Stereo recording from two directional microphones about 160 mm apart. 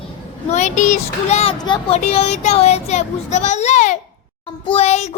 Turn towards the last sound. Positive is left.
turn(degrees=45)  # may be behind; listen again after turning